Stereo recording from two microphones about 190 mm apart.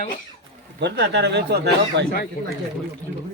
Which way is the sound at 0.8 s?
65° right (ahead or behind).